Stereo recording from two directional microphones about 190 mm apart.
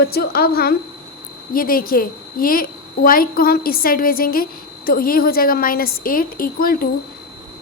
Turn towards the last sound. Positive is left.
turn(degrees=50)  # may be behind; listen again after turning